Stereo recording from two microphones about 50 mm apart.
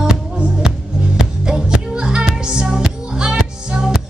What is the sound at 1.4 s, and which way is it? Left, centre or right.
Music, centre.